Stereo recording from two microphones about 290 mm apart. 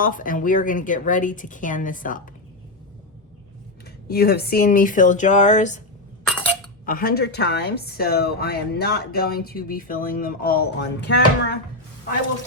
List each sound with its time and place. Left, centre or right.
0.0 s a woman's voice: left
4.1 s a woman's voice: left
6.8 s a woman's voice: left